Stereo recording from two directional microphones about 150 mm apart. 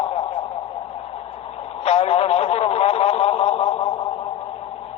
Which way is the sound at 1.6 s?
40° left (ahead or behind).